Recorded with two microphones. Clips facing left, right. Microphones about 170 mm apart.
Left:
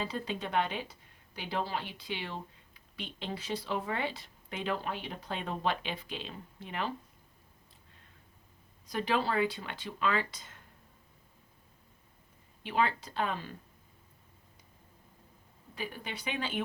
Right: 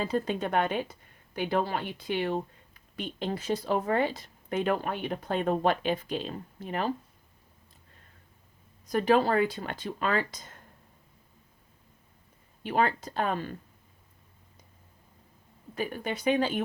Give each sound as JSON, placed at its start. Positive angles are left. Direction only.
{"t": 0.0, "sound": "speech", "side_deg": -45}
{"t": 8.9, "sound": "speech", "side_deg": -45}
{"t": 12.6, "sound": "speech", "side_deg": -45}
{"t": 15.7, "sound": "speech", "side_deg": -50}